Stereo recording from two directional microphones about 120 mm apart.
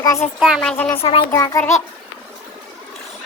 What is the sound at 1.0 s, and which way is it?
Speech, 50° left (ahead or behind).